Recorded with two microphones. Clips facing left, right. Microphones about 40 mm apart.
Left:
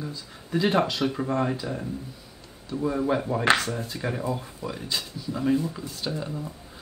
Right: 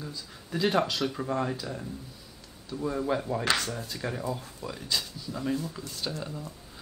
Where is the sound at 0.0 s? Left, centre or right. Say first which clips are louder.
Left 4 dB; centre.